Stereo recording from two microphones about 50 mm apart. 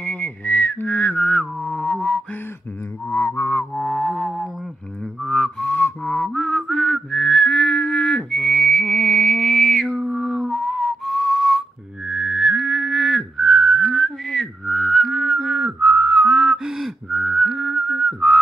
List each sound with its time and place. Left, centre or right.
0.0 s whistling: left
1.6 s music: centre
3.1 s music: left
3.7 s music: centre
5.8 s music: left
6.2 s music: centre
9.8 s whistle: centre
12.1 s whistling: centre